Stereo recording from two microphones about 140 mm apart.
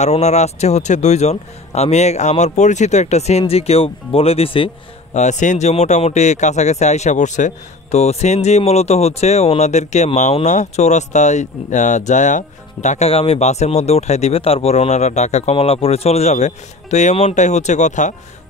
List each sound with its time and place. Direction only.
0.0 s a man's voice: 55° left (ahead or behind)
5.1 s a man's voice: 60° left (ahead or behind)